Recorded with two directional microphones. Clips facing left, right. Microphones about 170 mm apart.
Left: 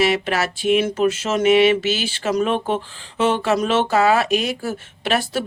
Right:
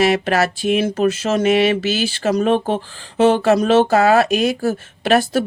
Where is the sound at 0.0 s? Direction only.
45° right (ahead or behind).